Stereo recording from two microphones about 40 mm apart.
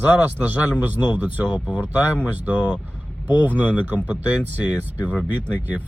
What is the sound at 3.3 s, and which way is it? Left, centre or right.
Speech, right.